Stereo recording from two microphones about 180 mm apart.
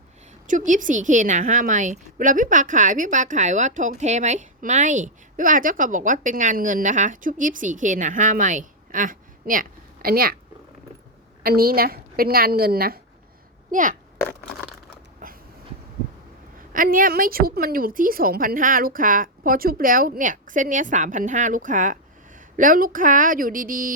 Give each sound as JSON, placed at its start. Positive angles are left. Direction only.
{"t": 0.4, "sound": "a woman's voice", "side_deg": -45}
{"t": 11.4, "sound": "a woman's voice", "side_deg": -55}
{"t": 13.7, "sound": "speech", "side_deg": -45}
{"t": 15.2, "sound": "a sound", "side_deg": -50}
{"t": 16.7, "sound": "a woman's voice", "side_deg": -50}